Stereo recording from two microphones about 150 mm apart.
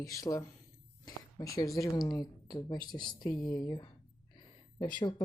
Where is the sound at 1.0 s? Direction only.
25° left (ahead or behind).